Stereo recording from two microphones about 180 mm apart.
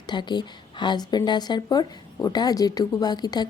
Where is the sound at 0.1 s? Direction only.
25° left (ahead or behind).